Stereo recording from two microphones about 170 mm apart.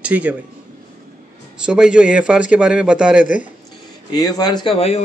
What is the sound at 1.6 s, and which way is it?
A man's voice, 5° right (ahead or behind).